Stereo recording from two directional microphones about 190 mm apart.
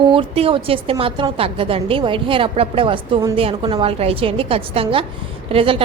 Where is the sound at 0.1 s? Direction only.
30° right (ahead or behind).